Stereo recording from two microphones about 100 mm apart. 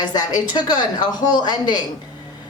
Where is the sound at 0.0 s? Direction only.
40° left (ahead or behind).